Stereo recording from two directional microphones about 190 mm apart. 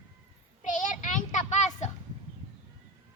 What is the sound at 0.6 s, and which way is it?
Child singing, 40° left (ahead or behind).